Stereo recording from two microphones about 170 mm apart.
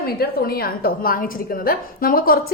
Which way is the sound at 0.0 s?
65° left (ahead or behind).